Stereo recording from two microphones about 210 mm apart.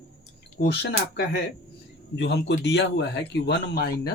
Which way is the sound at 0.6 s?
55° left (ahead or behind).